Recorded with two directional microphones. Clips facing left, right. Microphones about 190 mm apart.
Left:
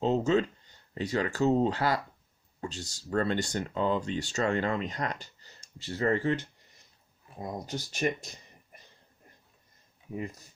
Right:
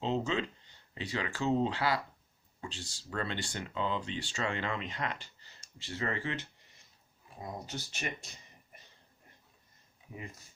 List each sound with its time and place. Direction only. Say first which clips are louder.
0.0 s speech: left 7 dB; 45° left (ahead or behind)
7.4 s speech: left 5 dB; 40° left (ahead or behind)